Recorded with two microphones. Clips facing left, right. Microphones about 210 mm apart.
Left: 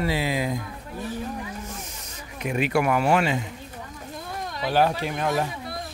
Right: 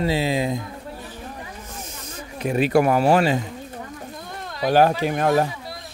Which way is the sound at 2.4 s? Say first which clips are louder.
Right 5 dB; 35° right (ahead or behind).